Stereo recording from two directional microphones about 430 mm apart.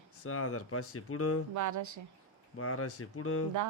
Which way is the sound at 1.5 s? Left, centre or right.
Right.